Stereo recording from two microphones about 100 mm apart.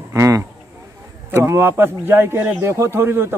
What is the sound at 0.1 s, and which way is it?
A man's voice, 30° right (ahead or behind).